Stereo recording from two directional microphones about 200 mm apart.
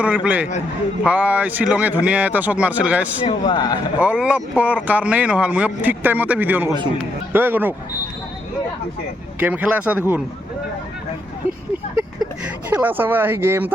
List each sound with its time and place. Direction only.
0.0 s a man's voice: 5° right (ahead or behind)
3.2 s speech: 20° left (ahead or behind)
4.0 s a man's voice: 5° right (ahead or behind)
9.4 s a man's voice: 5° right (ahead or behind)
12.7 s a man's voice: 10° right (ahead or behind)